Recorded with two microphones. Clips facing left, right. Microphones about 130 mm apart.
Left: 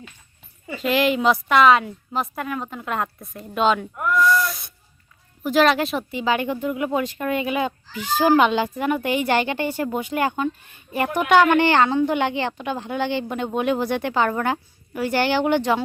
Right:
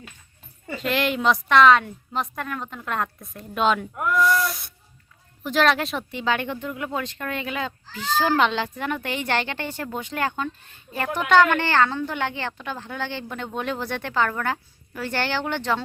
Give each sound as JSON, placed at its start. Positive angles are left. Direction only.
{"t": 0.7, "sound": "a woman's voice", "side_deg": 5}